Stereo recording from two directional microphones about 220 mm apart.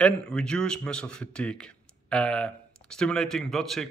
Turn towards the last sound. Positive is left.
turn(degrees=0)  # may be behind; listen again after turning